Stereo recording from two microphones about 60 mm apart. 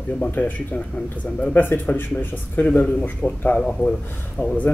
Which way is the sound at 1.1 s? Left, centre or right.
Left.